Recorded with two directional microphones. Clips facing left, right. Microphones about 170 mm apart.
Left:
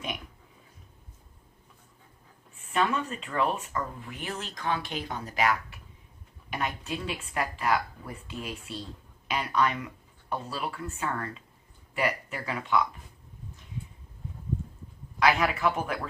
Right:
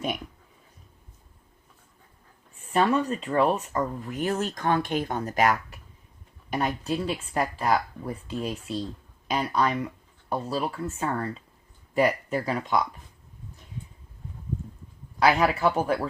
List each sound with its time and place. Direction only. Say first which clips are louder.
2.6 s speech: right 5 dB; 35° right (ahead or behind)
15.2 s speech: right 3 dB; 35° right (ahead or behind)